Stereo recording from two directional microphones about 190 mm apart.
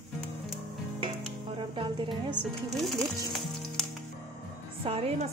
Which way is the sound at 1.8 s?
25° right (ahead or behind).